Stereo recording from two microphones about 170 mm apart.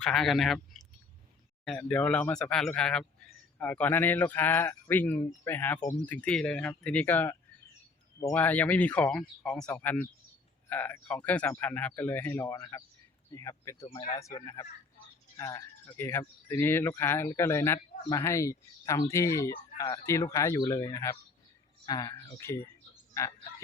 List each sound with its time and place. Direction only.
0.0 s speech: centre (ahead or behind); by 13.8 s 20° left (ahead or behind)
13.8 s speech: 30° left (ahead or behind)
14.2 s speech: 20° left (ahead or behind)